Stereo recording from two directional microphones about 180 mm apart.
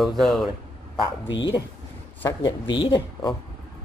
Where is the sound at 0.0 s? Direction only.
Centre (ahead or behind).